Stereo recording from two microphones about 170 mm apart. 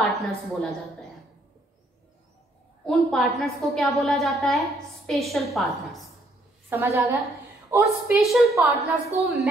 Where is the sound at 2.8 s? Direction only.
Centre (ahead or behind).